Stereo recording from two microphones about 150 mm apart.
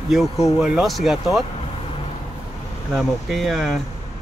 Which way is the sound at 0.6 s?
5° right (ahead or behind).